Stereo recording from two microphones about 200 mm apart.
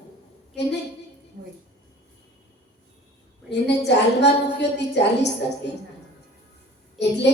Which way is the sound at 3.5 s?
60° left (ahead or behind).